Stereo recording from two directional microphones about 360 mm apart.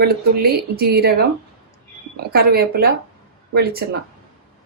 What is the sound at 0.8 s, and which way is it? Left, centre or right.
Speech, right.